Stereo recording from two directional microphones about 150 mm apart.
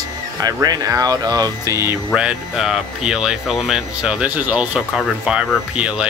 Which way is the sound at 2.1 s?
5° right (ahead or behind).